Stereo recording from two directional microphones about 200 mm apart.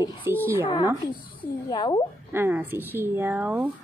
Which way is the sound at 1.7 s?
20° left (ahead or behind).